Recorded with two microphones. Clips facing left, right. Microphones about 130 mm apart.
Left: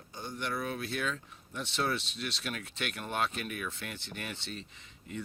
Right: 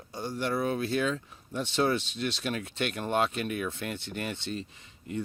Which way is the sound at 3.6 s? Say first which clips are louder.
Right 6 dB; 25° right (ahead or behind).